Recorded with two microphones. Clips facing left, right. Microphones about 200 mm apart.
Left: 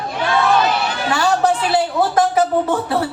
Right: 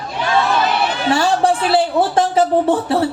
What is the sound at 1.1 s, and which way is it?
A man's voice, 30° right (ahead or behind).